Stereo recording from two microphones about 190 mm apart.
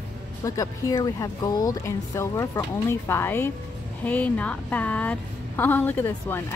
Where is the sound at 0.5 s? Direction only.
15° left (ahead or behind).